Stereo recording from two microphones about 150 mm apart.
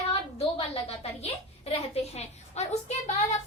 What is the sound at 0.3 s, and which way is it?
A woman's voice, 40° left (ahead or behind).